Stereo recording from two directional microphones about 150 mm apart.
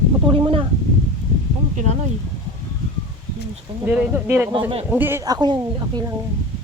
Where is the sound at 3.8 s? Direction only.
10° right (ahead or behind).